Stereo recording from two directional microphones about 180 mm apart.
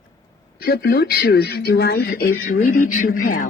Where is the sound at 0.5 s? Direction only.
60° left (ahead or behind).